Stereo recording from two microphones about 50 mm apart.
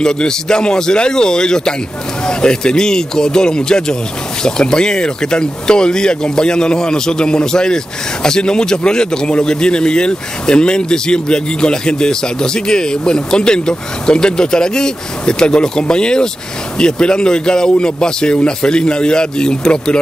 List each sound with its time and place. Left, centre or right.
0.0 s speech: centre